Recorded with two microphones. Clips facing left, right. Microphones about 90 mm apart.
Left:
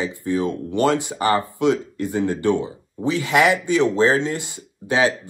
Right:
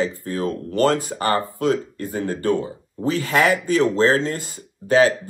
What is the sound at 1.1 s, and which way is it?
Speech, 20° left (ahead or behind).